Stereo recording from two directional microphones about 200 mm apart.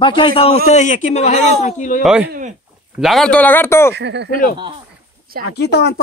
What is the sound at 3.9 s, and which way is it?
Speech, 60° right (ahead or behind).